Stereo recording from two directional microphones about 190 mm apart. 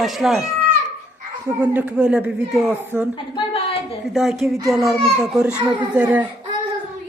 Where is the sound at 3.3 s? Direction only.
30° left (ahead or behind).